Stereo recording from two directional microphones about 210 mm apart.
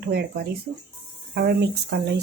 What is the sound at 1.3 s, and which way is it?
Speech, 50° right (ahead or behind).